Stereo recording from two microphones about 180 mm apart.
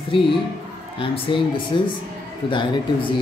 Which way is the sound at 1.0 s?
30° left (ahead or behind).